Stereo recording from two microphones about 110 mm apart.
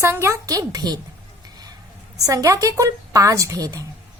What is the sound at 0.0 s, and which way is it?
Speech, 25° right (ahead or behind).